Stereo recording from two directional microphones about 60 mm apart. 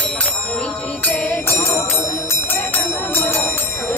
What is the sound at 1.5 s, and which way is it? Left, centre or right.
Music, left.